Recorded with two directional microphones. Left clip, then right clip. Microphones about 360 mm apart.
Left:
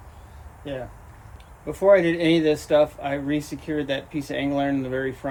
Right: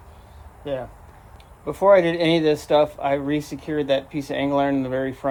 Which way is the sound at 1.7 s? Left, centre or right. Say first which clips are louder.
Right 2 dB; centre.